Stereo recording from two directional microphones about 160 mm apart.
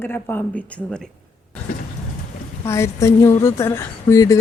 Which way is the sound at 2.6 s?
20° left (ahead or behind).